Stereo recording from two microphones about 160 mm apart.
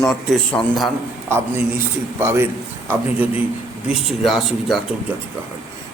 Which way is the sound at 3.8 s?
Centre (ahead or behind).